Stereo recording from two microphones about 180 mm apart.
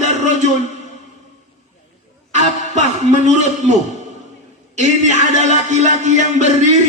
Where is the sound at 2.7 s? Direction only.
40° right (ahead or behind).